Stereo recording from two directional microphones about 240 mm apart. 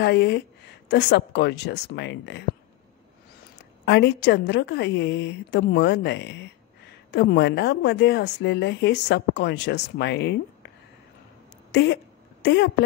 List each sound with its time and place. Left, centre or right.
0.0 s speech: left
3.5 s speech: left
11.7 s a sound: left